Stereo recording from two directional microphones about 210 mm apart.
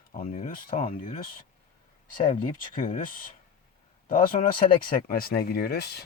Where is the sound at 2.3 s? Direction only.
40° left (ahead or behind).